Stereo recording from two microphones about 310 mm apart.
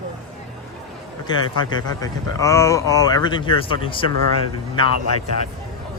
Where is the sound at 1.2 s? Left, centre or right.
Centre.